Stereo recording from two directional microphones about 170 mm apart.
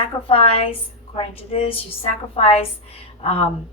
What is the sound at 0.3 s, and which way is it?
A woman's voice, 35° left (ahead or behind).